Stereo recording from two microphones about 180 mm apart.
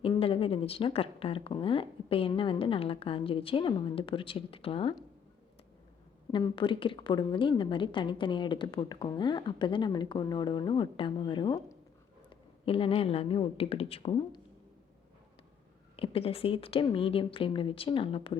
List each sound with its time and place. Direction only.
0.0 s speech: 30° left (ahead or behind)
6.3 s a woman's voice: 25° left (ahead or behind)
16.0 s speech: 30° left (ahead or behind)